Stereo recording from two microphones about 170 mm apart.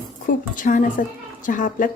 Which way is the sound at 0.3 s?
50° left (ahead or behind).